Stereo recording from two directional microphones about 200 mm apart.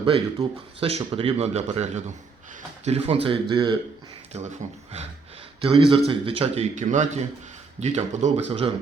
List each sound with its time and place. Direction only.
0.0 s speech: 25° right (ahead or behind)
5.6 s speech: 25° right (ahead or behind)